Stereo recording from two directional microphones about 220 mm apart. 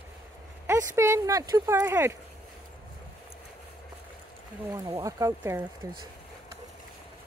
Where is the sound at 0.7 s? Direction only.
10° right (ahead or behind).